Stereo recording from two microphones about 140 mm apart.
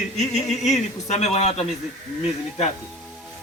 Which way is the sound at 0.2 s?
55° left (ahead or behind).